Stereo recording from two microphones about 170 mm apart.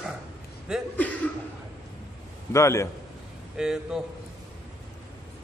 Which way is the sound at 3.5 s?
5° right (ahead or behind).